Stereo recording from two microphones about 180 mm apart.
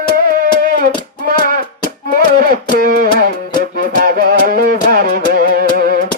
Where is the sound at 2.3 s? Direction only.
55° right (ahead or behind).